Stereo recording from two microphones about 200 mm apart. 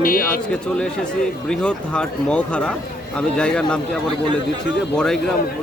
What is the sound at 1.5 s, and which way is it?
Speech, 5° left (ahead or behind).